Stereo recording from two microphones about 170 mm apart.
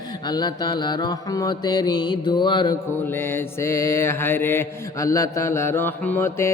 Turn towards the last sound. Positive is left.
turn(degrees=15)  # may be behind; listen again after turning